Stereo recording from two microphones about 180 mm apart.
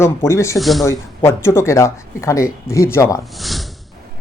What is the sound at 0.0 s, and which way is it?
Speech, 15° left (ahead or behind).